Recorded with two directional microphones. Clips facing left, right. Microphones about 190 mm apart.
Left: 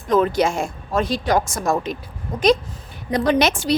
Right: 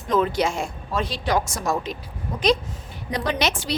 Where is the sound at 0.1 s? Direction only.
50° left (ahead or behind).